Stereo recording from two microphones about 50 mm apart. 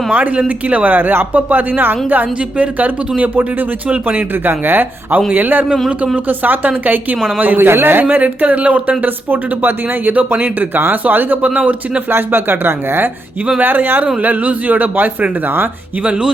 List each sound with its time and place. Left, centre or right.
0.1 s speech: right
8.2 s speech: right
11.4 s speech: right
12.1 s speech: right
14.2 s speech: right
16.0 s speech: centre